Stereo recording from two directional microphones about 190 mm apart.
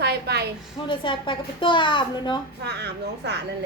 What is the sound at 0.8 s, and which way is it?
A child's voice, 25° left (ahead or behind).